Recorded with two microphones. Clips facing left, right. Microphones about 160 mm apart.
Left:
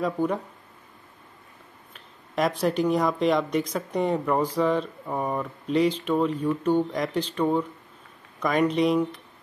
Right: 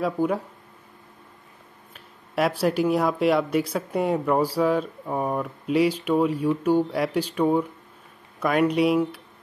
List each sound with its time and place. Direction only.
0.0 s speech: 5° right (ahead or behind)
2.0 s speech: 5° right (ahead or behind)